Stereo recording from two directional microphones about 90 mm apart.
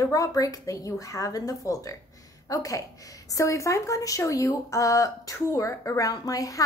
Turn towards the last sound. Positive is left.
turn(degrees=40)  # may be behind; listen again after turning